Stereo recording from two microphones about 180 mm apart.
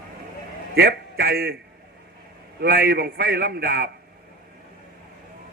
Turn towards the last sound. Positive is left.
turn(degrees=-55)  # may be behind; listen again after turning